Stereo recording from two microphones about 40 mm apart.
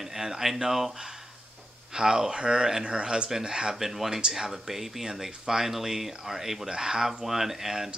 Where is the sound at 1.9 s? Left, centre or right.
Centre.